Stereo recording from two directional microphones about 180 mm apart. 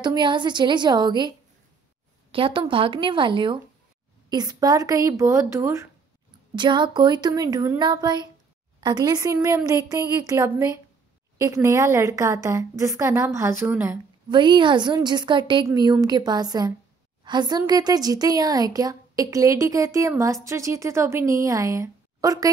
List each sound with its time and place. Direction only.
0.0 s speech: 25° right (ahead or behind)
2.3 s a woman's voice: 30° right (ahead or behind); by 13.9 s 10° right (ahead or behind)
14.3 s a woman's voice: 25° right (ahead or behind)